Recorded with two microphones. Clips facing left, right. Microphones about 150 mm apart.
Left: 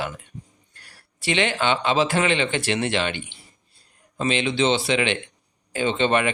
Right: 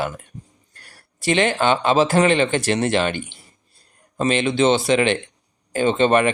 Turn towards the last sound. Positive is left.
turn(degrees=-45)  # may be behind; listen again after turning